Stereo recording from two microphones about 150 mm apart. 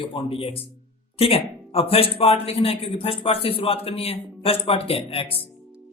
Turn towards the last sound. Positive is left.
turn(degrees=40)  # may be behind; listen again after turning